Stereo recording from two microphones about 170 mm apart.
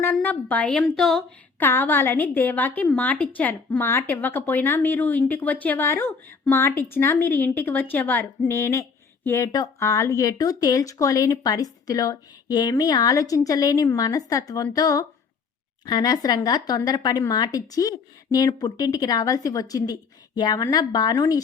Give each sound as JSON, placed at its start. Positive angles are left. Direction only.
{"t": 0.1, "sound": "a woman's voice", "side_deg": 10}